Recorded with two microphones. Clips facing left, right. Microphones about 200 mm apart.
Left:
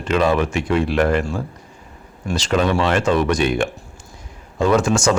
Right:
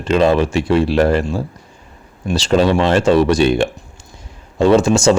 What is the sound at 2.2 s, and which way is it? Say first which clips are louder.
Speech: right 5 dB; 30° right (ahead or behind).